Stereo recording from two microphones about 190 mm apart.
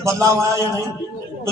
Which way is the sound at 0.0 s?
15° right (ahead or behind).